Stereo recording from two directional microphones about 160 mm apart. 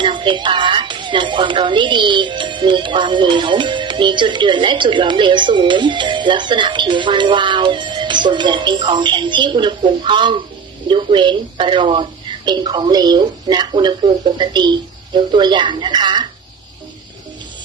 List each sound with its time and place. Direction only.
0.0 s a woman's voice: 30° right (ahead or behind)